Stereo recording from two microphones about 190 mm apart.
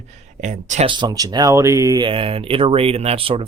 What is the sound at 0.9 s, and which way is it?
Speech, 20° right (ahead or behind).